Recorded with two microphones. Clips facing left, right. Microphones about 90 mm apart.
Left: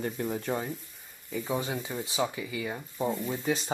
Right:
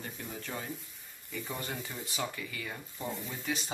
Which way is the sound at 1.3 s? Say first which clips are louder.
Left 7 dB; 15° left (ahead or behind).